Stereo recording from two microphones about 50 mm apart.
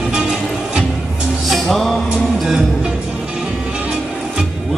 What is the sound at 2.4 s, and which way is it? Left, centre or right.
Music, centre.